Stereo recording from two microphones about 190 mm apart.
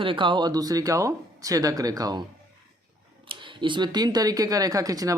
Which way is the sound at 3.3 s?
25° right (ahead or behind).